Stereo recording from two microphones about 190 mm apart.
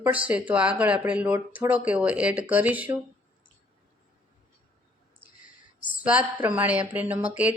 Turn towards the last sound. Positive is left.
turn(degrees=-5)  # may be behind; listen again after turning